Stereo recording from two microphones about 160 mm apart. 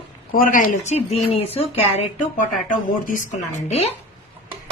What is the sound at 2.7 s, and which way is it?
Speech, 55° left (ahead or behind).